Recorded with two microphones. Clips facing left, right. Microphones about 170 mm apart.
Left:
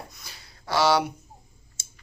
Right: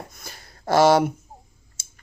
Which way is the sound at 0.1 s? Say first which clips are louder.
Right 5 dB; 50° right (ahead or behind).